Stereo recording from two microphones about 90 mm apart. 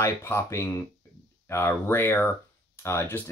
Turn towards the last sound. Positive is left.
turn(degrees=25)  # may be behind; listen again after turning